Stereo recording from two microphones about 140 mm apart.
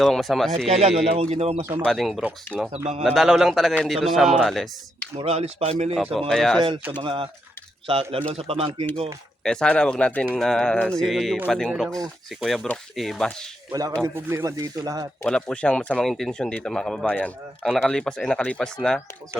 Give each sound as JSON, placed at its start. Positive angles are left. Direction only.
{"t": 0.0, "sound": "speech", "side_deg": 0}
{"t": 0.7, "sound": "speech", "side_deg": -50}
{"t": 1.8, "sound": "speech", "side_deg": 0}
{"t": 2.7, "sound": "speech", "side_deg": -50}
{"t": 3.0, "sound": "speech", "side_deg": -5}
{"t": 5.1, "sound": "speech", "side_deg": -45}
{"t": 6.1, "sound": "speech", "side_deg": 0}
{"t": 6.9, "sound": "speech", "side_deg": -40}
{"t": 9.4, "sound": "speech", "side_deg": 5}
{"t": 13.7, "sound": "speech", "side_deg": -25}
{"t": 15.2, "sound": "speech", "side_deg": 5}